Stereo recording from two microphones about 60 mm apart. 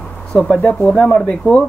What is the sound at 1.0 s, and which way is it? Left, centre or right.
Speech, centre.